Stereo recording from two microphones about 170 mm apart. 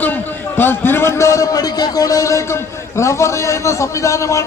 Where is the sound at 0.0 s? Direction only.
10° left (ahead or behind).